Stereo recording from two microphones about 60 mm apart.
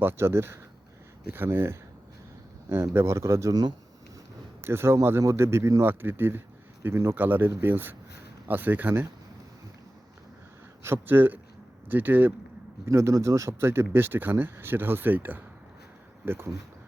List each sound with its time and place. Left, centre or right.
0.0 s a man's voice: right
4.6 s a man's voice: right
6.8 s a man's voice: right
7.2 s speech: right
10.8 s speech: right
12.8 s speech: right